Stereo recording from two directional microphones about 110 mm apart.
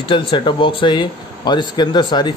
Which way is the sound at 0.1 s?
45° left (ahead or behind).